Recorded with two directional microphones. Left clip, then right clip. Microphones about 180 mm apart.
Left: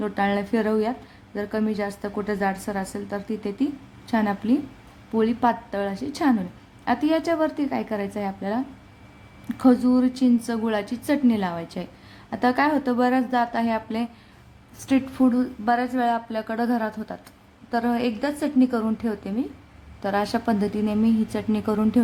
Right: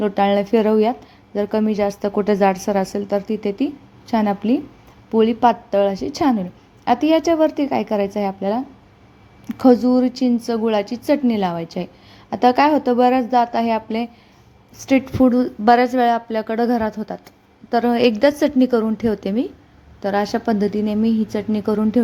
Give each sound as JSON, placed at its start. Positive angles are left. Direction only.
{"t": 0.0, "sound": "speech", "side_deg": -25}
{"t": 20.0, "sound": "a woman's voice", "side_deg": -15}